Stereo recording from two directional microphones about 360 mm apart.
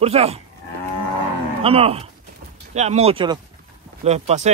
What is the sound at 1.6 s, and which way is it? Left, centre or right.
A man's voice, centre.